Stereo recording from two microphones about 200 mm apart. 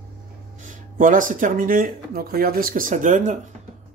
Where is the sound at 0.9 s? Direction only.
40° right (ahead or behind).